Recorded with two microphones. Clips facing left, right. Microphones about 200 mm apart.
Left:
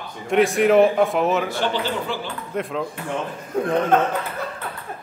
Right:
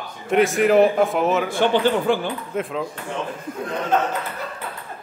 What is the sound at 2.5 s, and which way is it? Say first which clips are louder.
Speech: left 1 dB; centre (ahead or behind).